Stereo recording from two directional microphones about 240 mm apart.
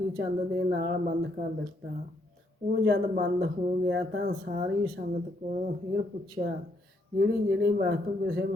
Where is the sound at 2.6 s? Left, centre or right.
Right.